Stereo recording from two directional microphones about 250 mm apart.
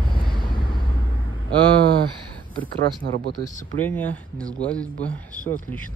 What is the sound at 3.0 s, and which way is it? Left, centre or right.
Speech, right.